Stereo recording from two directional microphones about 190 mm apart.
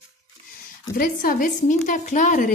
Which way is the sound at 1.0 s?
45° left (ahead or behind).